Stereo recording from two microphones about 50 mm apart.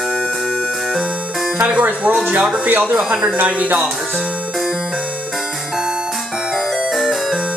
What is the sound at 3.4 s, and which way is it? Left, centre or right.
Music, right.